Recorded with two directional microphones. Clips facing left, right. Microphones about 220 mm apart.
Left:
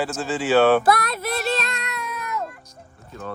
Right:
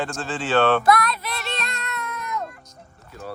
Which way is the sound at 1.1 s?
45° left (ahead or behind).